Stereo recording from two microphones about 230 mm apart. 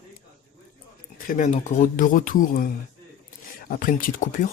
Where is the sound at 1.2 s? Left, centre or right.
Left.